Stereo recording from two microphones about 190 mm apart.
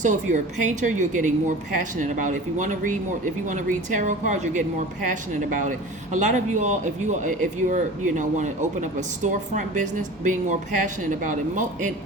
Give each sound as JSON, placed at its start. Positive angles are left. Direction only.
{"t": 0.0, "sound": "speech", "side_deg": -40}